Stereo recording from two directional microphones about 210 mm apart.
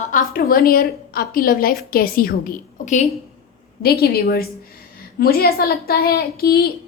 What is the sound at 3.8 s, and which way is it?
A woman's voice, 45° left (ahead or behind).